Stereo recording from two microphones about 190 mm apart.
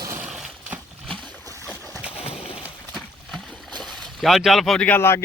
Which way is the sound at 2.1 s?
35° left (ahead or behind).